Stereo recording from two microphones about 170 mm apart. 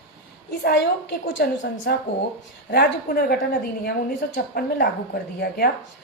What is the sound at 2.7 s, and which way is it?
A woman's voice, 65° left (ahead or behind).